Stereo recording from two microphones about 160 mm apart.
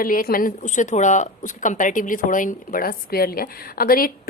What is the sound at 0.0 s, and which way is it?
A woman's voice, 65° left (ahead or behind).